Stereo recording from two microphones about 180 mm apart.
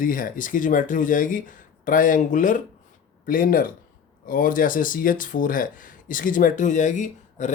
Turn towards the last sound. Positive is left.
turn(degrees=40)  # may be behind; listen again after turning